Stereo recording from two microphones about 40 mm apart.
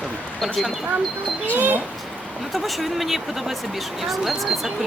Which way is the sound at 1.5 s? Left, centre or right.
Right.